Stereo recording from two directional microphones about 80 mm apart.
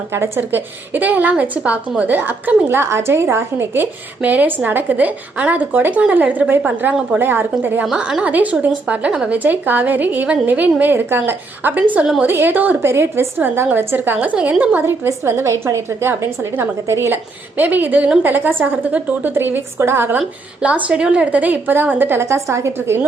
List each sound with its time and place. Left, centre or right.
0.1 s a woman's voice: right
7.9 s a woman's voice: centre
14.8 s a woman's voice: right
17.6 s a woman's voice: right
20.6 s a woman's voice: centre; by 23.0 s right